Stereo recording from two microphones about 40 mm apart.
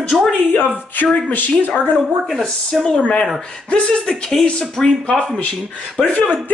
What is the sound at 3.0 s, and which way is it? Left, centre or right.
Speech, left.